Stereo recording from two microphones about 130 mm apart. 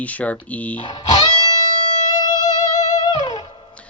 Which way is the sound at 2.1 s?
30° left (ahead or behind).